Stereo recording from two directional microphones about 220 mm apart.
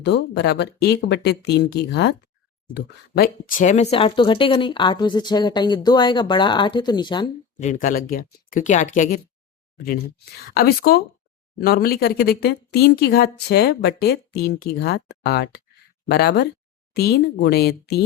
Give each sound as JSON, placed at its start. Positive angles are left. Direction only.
{"t": 0.0, "sound": "speech", "side_deg": 50}
{"t": 7.6, "sound": "speech", "side_deg": 35}
{"t": 10.4, "sound": "speech", "side_deg": 45}